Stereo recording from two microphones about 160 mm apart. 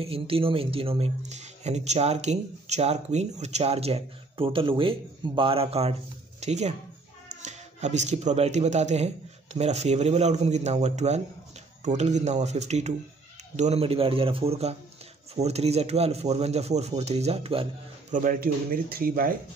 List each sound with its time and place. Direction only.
0.0 s speech: 35° right (ahead or behind)
18.1 s speech: 60° right (ahead or behind)